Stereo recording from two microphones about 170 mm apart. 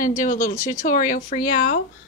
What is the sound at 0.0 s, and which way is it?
Speech, 50° left (ahead or behind).